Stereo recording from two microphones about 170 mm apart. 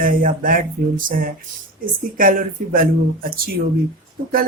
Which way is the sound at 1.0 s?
55° right (ahead or behind).